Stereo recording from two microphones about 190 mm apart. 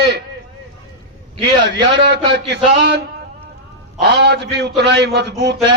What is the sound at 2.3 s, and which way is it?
Speech, 65° right (ahead or behind).